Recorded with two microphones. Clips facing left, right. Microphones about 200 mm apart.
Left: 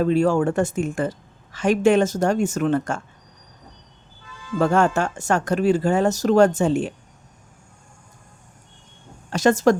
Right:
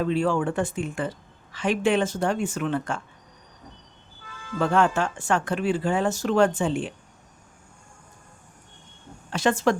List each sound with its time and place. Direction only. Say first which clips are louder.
0.0 s speech: left 5 dB; 45° left (ahead or behind)
4.5 s speech: left 3 dB; 45° left (ahead or behind)
9.3 s speech: left 5 dB; 40° left (ahead or behind)